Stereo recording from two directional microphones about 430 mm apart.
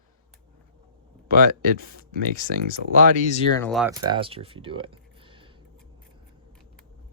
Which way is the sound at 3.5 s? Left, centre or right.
Centre.